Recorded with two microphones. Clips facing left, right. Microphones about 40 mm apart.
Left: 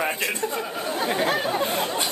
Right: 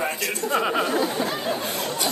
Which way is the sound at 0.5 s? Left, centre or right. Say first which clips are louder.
Right 7 dB; right.